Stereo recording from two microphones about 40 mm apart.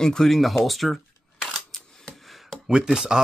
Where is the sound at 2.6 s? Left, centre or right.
Centre.